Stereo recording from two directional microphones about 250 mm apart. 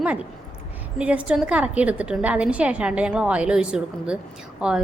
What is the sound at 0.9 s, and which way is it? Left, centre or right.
A woman's voice, centre.